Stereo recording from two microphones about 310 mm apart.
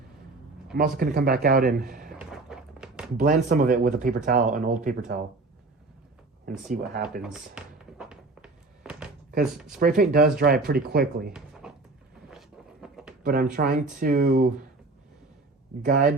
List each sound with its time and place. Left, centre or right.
0.8 s speech: right
2.1 s a sound: centre
3.2 s speech: right
6.7 s speech: right
7.2 s a sound: centre
9.4 s speech: centre
9.8 s speech: right
11.6 s a sound: centre
13.2 s speech: right
15.8 s speech: right